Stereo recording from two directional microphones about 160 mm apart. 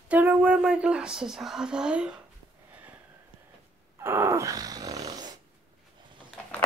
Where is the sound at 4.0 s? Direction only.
15° right (ahead or behind).